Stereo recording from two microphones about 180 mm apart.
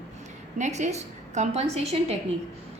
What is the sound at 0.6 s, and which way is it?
A woman's voice, 40° right (ahead or behind).